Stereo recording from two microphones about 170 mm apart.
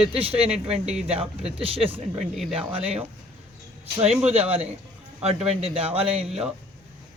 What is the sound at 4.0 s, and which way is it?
Speech, 5° right (ahead or behind).